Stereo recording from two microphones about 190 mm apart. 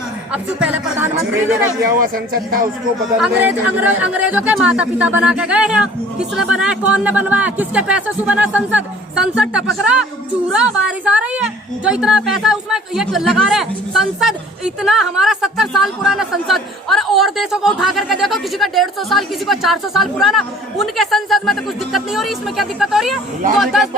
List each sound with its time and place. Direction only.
0.6 s speech: 5° right (ahead or behind)
1.8 s speech: 50° right (ahead or behind)
3.2 s speech: 10° right (ahead or behind)